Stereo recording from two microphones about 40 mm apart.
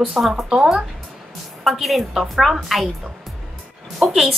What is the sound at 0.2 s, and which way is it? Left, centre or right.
Speech, centre.